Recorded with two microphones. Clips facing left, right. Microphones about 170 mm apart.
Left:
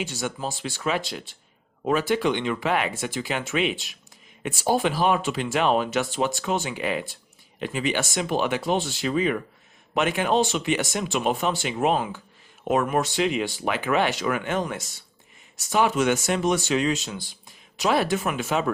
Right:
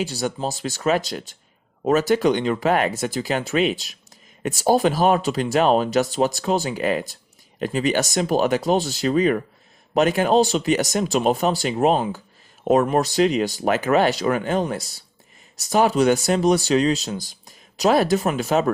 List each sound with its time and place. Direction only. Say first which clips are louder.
0.0 s speech: right 5 dB; 35° right (ahead or behind)